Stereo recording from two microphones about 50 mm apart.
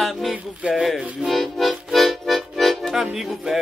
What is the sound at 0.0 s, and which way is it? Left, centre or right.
Music, centre.